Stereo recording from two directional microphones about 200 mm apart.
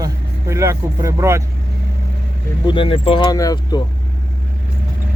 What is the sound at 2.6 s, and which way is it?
Speech, 25° left (ahead or behind).